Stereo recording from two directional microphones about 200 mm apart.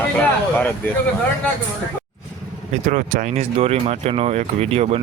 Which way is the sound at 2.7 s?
40° right (ahead or behind).